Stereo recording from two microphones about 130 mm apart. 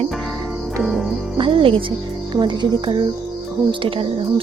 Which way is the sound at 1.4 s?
40° right (ahead or behind).